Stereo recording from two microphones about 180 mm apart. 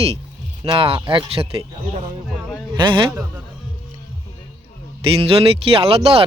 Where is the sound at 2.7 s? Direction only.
25° right (ahead or behind).